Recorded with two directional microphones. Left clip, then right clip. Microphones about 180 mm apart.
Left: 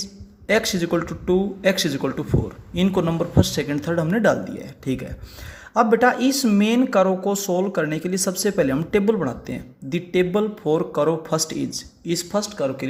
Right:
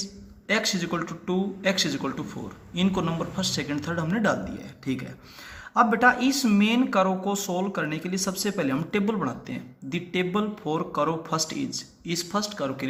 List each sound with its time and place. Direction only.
0.0 s speech: 45° left (ahead or behind)